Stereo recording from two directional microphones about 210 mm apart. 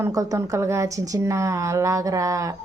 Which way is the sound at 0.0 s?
15° right (ahead or behind).